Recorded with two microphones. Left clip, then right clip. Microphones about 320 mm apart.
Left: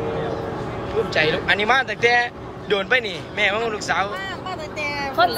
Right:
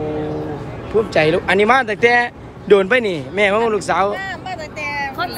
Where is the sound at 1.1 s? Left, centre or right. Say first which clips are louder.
Right 4 dB; centre.